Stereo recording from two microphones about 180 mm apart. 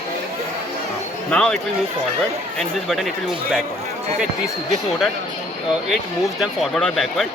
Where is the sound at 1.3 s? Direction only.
5° left (ahead or behind).